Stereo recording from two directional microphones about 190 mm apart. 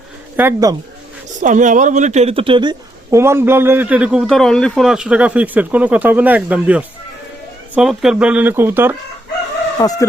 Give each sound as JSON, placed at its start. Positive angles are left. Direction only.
{"t": 0.3, "sound": "speech", "side_deg": -15}
{"t": 1.4, "sound": "speech", "side_deg": -40}
{"t": 9.8, "sound": "speech", "side_deg": 20}